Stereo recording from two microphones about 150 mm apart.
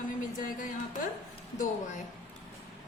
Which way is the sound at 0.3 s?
65° left (ahead or behind).